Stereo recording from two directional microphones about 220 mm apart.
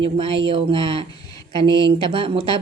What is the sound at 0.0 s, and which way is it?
Speech, 25° right (ahead or behind).